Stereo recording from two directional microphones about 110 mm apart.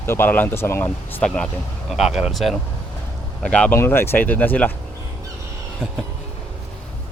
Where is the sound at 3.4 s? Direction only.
10° left (ahead or behind).